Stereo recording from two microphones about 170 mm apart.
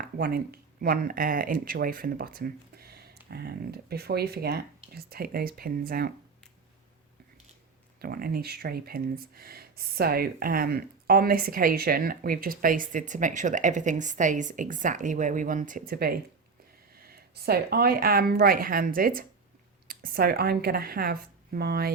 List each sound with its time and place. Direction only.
0.0 s speech: 65° right (ahead or behind)
8.0 s speech: 60° right (ahead or behind)